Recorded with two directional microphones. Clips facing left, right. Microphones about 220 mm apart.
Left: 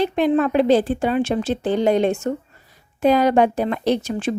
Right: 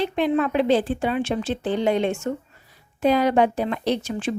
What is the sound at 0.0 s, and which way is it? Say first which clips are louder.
A woman's voice: left 4 dB; 45° left (ahead or behind).